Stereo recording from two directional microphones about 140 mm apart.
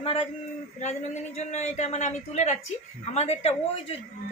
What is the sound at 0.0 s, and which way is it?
Speech, 45° left (ahead or behind).